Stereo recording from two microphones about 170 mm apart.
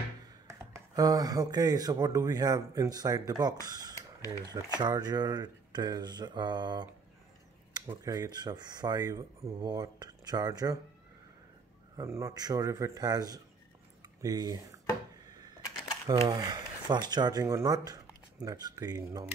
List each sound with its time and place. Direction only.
0.5 s speech: 20° right (ahead or behind)
3.9 s a sound: 20° left (ahead or behind)
4.7 s speech: 25° right (ahead or behind)
12.0 s speech: 15° right (ahead or behind)
15.2 s typewriter: 20° right (ahead or behind)
16.2 s speech: 25° right (ahead or behind)